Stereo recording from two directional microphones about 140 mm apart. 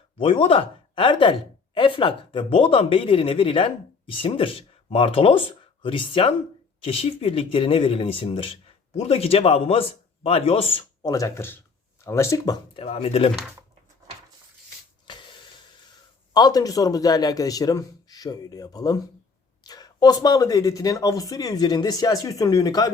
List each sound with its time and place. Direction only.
0.2 s a man's voice: 40° left (ahead or behind)
11.0 s speech: 25° left (ahead or behind)
12.7 s a man's voice: 45° left (ahead or behind)
15.0 s a sound: 35° left (ahead or behind)
16.3 s speech: 25° left (ahead or behind)